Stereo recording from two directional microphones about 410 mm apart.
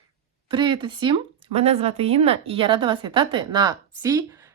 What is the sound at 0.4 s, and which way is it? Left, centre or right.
Speech, centre.